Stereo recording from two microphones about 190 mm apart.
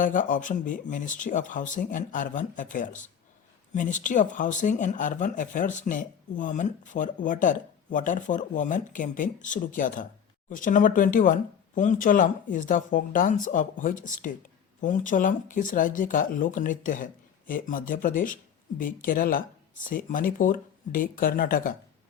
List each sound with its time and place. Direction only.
0.0 s speech: 45° left (ahead or behind)